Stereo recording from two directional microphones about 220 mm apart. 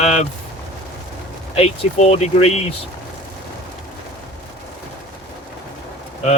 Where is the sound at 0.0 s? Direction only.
30° left (ahead or behind).